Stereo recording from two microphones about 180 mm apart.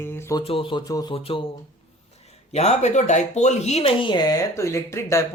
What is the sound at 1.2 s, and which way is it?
Speech, 30° left (ahead or behind).